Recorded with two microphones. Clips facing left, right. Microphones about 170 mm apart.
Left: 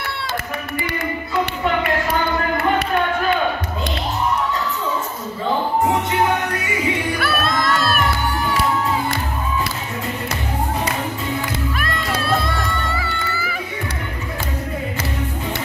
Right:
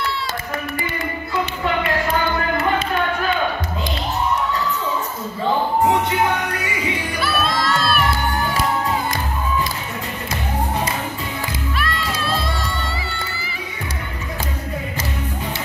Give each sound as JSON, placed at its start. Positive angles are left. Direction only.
{"t": 7.2, "sound": "music", "side_deg": 55}
{"t": 11.7, "sound": "crowd", "side_deg": 50}